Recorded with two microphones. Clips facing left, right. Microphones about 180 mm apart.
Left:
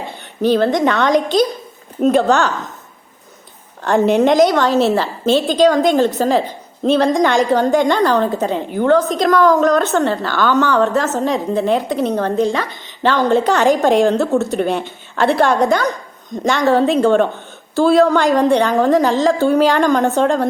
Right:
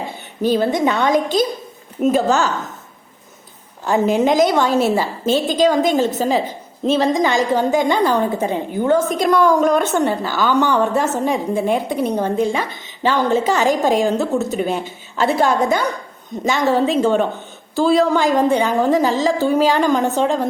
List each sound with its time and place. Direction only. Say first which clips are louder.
0.6 s a woman's voice: left 2 dB; 5° right (ahead or behind)
4.1 s a woman's voice: left 3 dB; centre (ahead or behind)